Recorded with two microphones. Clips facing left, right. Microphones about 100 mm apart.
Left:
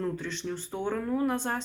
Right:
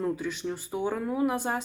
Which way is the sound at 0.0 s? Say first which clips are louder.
Right 3 dB; 10° right (ahead or behind).